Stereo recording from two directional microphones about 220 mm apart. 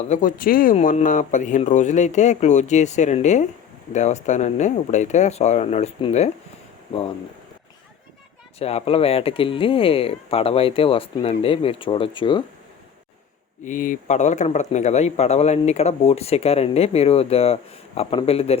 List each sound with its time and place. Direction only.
0.1 s speech: 35° left (ahead or behind)
8.5 s speech: 25° left (ahead or behind)
13.7 s speech: 40° left (ahead or behind)